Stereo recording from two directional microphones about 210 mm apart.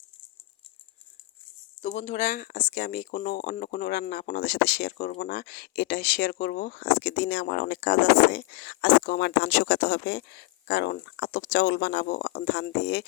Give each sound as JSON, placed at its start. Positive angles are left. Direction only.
{"t": 1.8, "sound": "speech", "side_deg": 35}